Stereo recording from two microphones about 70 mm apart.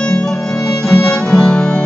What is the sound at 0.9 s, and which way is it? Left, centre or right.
Music, centre.